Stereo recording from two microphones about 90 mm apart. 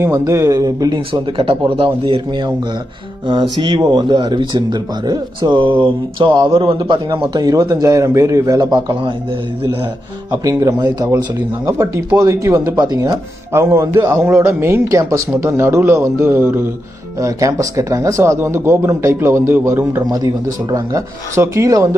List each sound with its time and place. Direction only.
0.0 s speech: 30° right (ahead or behind)
1.4 s speech: 70° right (ahead or behind)
6.8 s speech: 65° right (ahead or behind)
7.3 s speech: 40° right (ahead or behind)
10.3 s speech: 35° right (ahead or behind)
11.6 s speech: 35° right (ahead or behind)
12.7 s speech: 55° right (ahead or behind)
13.5 s speech: 30° right (ahead or behind)
17.2 s speech: 40° right (ahead or behind)
20.0 s speech: 40° right (ahead or behind)